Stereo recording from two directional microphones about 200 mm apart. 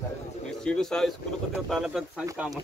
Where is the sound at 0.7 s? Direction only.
5° left (ahead or behind).